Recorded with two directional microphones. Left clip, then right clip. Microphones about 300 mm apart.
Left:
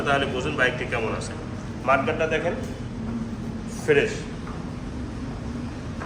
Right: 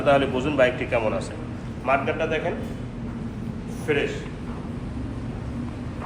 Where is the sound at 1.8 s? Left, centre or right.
Centre.